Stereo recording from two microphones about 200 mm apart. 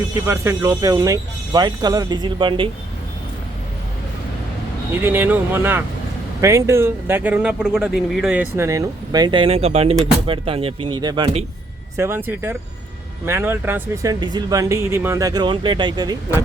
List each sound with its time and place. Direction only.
0.3 s speech: 15° right (ahead or behind)
5.0 s speech: 10° right (ahead or behind)
11.9 s speech: 10° right (ahead or behind)